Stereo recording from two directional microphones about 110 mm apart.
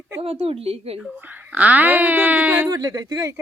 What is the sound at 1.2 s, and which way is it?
Speech, 15° right (ahead or behind).